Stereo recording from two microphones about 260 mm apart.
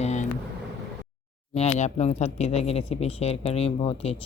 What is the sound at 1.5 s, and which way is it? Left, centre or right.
Speech, left.